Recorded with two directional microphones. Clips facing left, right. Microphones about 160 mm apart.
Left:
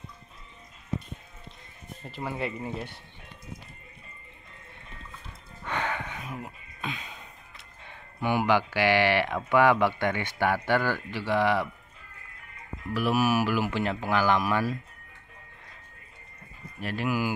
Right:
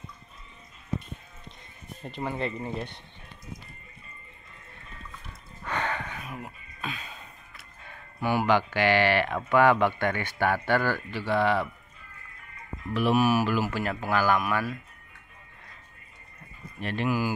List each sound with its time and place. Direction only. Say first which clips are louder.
2.0 s speech: right 1 dB; 5° left (ahead or behind)
5.7 s a sound: even; 15° left (ahead or behind)
6.2 s speech: left 1 dB; 25° left (ahead or behind)
12.9 s speech: right 2 dB; 5° left (ahead or behind)
14.4 s speech: left 2 dB; 30° left (ahead or behind)
16.8 s speech: right 1 dB; 5° left (ahead or behind)